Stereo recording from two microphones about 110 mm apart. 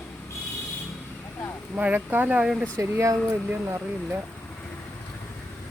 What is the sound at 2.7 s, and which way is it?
Speech, 30° right (ahead or behind).